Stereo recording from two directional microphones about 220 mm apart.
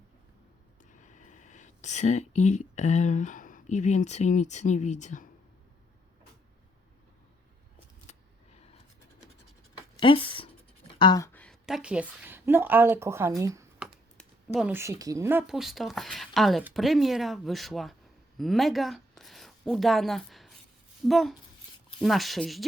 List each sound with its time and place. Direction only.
0.9 s speech: 35° left (ahead or behind)
8.1 s vehicle: 30° left (ahead or behind)
10.0 s speech: 25° left (ahead or behind)
11.3 s a woman's voice: 5° left (ahead or behind); by 13.7 s 15° right (ahead or behind)
13.7 s speech: centre (ahead or behind)